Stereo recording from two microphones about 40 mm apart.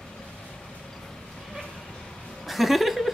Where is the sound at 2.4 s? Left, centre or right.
Centre.